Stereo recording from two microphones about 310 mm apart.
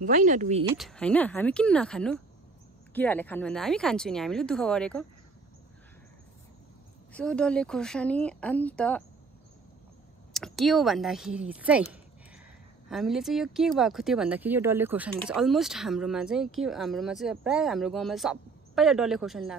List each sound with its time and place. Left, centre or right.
0.0 s speech: right
0.7 s speech: centre
7.2 s speech: centre
10.3 s speech: centre